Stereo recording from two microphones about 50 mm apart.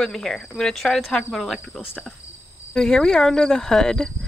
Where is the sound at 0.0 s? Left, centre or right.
Centre.